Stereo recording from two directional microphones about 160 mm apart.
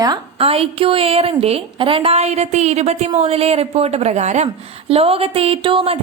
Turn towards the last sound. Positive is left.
turn(degrees=-35)  # may be behind; listen again after turning